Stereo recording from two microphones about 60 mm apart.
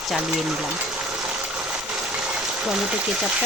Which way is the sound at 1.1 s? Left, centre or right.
Centre.